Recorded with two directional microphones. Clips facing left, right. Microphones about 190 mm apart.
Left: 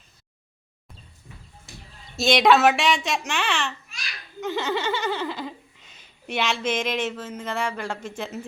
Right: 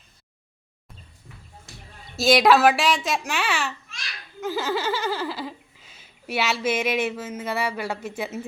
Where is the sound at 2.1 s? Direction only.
Centre (ahead or behind).